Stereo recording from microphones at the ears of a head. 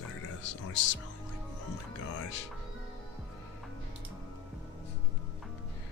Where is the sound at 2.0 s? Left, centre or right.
Left.